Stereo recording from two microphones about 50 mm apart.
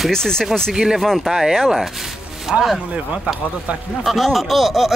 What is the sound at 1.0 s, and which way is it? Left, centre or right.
Speech, centre.